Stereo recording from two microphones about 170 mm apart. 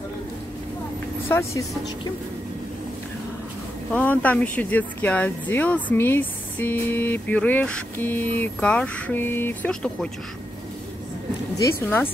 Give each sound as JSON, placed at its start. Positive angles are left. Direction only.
{"t": 1.3, "sound": "speech", "side_deg": 15}
{"t": 3.9, "sound": "speech", "side_deg": 10}
{"t": 11.5, "sound": "speech", "side_deg": 15}